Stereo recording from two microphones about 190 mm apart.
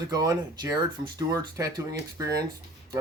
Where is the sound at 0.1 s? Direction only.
20° right (ahead or behind).